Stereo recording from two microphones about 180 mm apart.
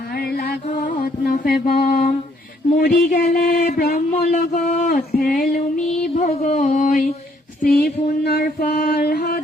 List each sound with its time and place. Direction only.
0.1 s music: 60° left (ahead or behind)
0.7 s music: 45° left (ahead or behind)
2.7 s speech: 50° left (ahead or behind)
6.1 s a sound: 40° left (ahead or behind)
7.6 s female singing: 55° left (ahead or behind)